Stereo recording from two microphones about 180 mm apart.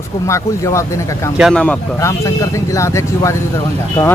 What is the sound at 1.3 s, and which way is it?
Speech, centre (ahead or behind).